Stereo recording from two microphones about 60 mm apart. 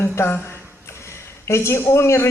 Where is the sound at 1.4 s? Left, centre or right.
Left.